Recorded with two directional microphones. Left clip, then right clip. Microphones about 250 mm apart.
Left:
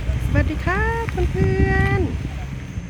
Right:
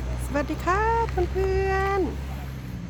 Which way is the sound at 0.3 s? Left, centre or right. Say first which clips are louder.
Left 1 dB; centre.